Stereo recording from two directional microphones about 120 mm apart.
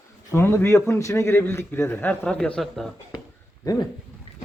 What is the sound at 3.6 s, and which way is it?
Dog, 30° left (ahead or behind).